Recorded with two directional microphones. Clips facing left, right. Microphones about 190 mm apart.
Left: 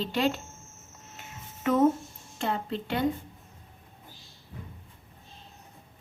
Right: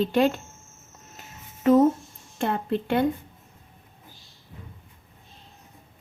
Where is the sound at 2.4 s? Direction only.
55° right (ahead or behind).